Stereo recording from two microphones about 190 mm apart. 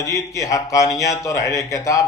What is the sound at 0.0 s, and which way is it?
Speech, 15° left (ahead or behind).